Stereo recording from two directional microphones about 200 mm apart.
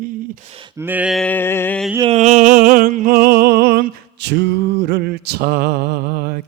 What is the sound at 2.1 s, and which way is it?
Music, 35° right (ahead or behind).